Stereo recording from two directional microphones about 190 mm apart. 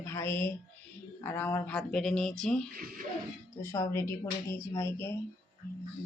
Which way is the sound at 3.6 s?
15° left (ahead or behind).